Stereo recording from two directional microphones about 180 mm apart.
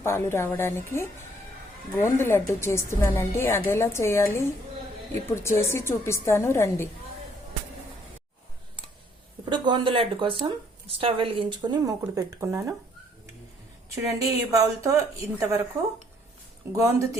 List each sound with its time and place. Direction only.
0.0 s a woman's voice: 15° left (ahead or behind)
9.5 s speech: 25° right (ahead or behind)
14.0 s a woman's voice: 15° right (ahead or behind)
16.7 s a woman's voice: 15° right (ahead or behind)